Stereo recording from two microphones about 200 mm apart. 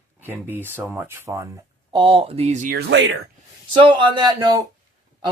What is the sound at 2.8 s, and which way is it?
Speech, 65° right (ahead or behind).